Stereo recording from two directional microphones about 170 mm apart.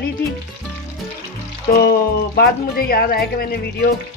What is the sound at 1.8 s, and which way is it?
Speech, 65° left (ahead or behind).